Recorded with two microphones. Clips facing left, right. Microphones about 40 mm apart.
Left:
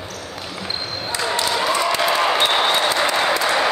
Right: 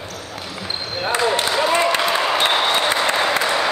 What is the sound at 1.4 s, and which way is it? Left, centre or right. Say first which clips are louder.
Basketball bounce: right 1 dB; centre.